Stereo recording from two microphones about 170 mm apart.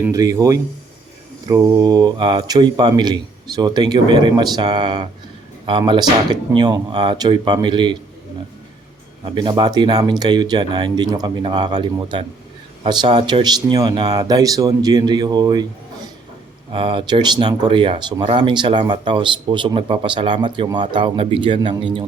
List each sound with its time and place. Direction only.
0.0 s speech: 20° right (ahead or behind)
9.3 s speech: 25° right (ahead or behind)
16.7 s speech: 30° right (ahead or behind)